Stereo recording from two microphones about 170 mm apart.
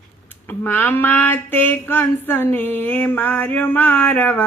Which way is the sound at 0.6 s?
10° left (ahead or behind).